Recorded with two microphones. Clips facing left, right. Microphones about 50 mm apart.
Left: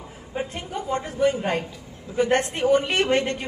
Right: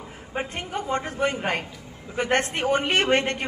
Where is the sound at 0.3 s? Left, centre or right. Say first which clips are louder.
Even; right.